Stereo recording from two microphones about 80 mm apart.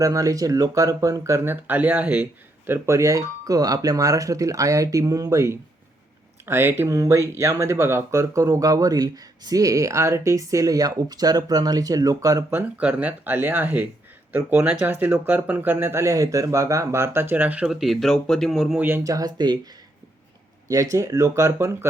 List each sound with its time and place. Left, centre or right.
0.0 s speech: right
1.6 s speech: right
2.6 s speech: right
6.4 s speech: right
12.7 s speech: centre
16.0 s speech: right; by 17.7 s centre
17.7 s speech: centre
18.8 s speech: right
19.0 s speech: right
20.7 s speech: right